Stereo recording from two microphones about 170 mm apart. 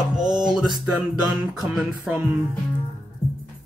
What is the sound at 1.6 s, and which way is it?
Music, 5° right (ahead or behind).